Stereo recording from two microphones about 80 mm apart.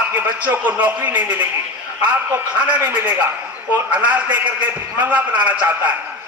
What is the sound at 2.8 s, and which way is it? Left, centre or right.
A man's voice, right.